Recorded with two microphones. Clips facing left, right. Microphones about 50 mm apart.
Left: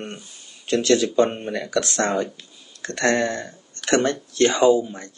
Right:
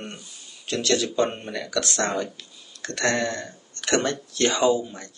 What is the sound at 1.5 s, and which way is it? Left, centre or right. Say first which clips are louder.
Speech: left 3 dB; left.